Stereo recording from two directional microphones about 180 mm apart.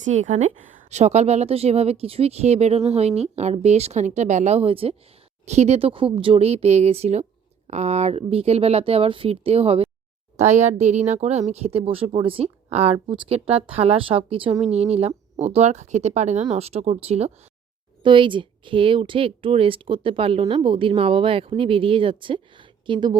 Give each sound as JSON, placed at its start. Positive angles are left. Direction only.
{"t": 0.0, "sound": "a woman's voice", "side_deg": -40}